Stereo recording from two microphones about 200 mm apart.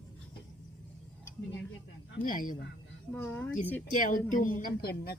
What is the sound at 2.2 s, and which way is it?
Speech, 45° left (ahead or behind).